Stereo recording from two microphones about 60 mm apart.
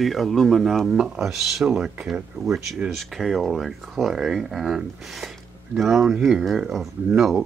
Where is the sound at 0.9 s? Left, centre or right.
Centre.